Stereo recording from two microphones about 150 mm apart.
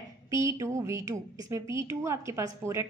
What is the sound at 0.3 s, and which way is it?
A woman's voice, 20° right (ahead or behind).